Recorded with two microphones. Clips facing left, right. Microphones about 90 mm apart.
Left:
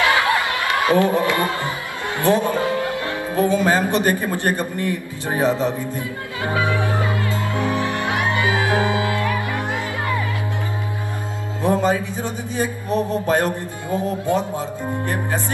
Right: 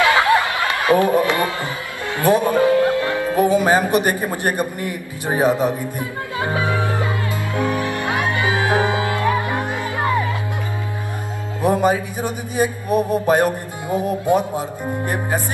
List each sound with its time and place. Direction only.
0.8 s a man's voice: 20° right (ahead or behind)
6.4 s music: 25° right (ahead or behind)
11.6 s speech: 15° right (ahead or behind)